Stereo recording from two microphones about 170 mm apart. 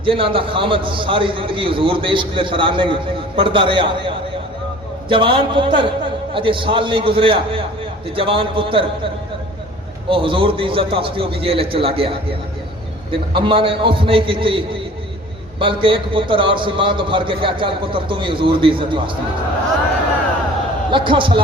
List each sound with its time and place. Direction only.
0.0 s a man's voice: 30° right (ahead or behind)
10.1 s a man's voice: 30° right (ahead or behind)
20.9 s a man's voice: 30° right (ahead or behind)